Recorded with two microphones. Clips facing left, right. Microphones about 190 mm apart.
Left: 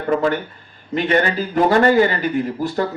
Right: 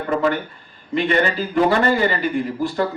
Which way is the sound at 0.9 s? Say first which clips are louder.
Left 1 dB; 45° left (ahead or behind).